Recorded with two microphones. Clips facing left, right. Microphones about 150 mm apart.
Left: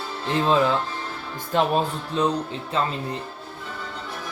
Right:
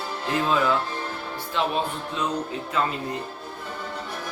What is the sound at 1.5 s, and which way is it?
Speech, 45° left (ahead or behind).